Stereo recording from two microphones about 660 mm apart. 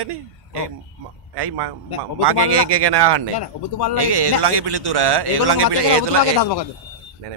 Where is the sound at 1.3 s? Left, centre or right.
Right.